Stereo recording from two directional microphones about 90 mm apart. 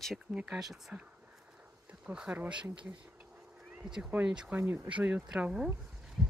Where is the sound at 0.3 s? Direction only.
10° right (ahead or behind).